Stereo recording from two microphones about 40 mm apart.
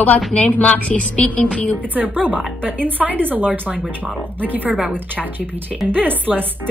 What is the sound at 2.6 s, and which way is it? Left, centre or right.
Speech, right.